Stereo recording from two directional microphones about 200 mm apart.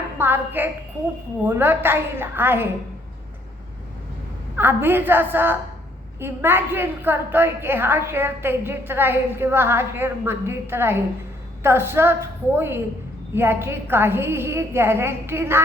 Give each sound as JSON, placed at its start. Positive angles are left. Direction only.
{"t": 0.2, "sound": "a woman's voice", "side_deg": -10}
{"t": 4.5, "sound": "a woman's voice", "side_deg": -10}